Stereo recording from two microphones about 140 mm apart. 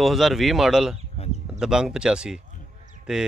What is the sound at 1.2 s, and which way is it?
Speech, 45° left (ahead or behind).